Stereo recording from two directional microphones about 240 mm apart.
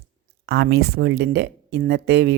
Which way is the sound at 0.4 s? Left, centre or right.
Right.